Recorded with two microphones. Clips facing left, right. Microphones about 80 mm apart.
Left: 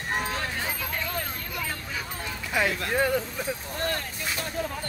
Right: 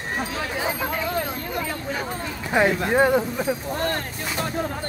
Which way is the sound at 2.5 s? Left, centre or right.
Right.